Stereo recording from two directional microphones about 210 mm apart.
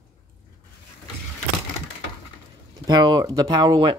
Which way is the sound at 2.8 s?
20° right (ahead or behind).